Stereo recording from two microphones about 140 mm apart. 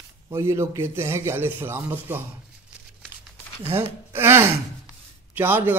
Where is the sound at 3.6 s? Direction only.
15° right (ahead or behind).